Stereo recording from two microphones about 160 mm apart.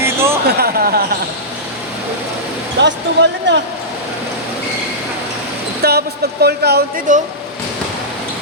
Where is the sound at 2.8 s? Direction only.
90° right.